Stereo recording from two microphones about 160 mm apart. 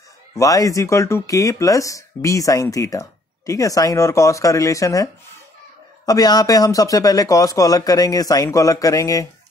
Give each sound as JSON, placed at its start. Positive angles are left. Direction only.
{"t": 0.4, "sound": "speech", "side_deg": 20}